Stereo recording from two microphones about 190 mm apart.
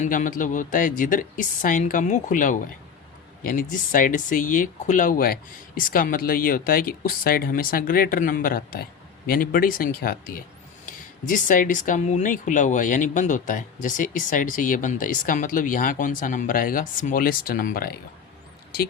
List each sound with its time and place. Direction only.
0.0 s speech: 40° left (ahead or behind)